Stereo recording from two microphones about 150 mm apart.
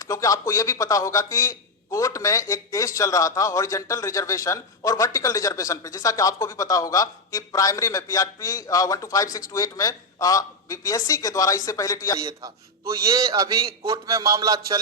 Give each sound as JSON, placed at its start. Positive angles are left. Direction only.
{"t": 0.1, "sound": "a man's voice", "side_deg": 20}
{"t": 12.9, "sound": "a man's voice", "side_deg": -20}